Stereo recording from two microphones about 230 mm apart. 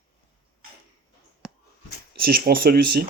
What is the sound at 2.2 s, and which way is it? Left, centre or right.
Speech, right.